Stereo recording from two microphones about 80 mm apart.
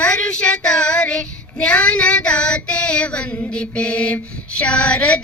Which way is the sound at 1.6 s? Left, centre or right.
Centre.